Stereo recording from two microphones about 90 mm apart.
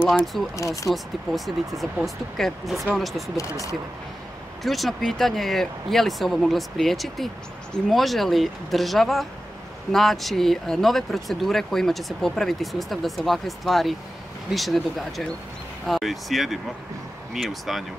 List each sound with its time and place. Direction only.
0.1 s speech: centre (ahead or behind)
0.6 s speech: 35° left (ahead or behind)
0.9 s speech: centre (ahead or behind)
4.6 s speech: centre (ahead or behind)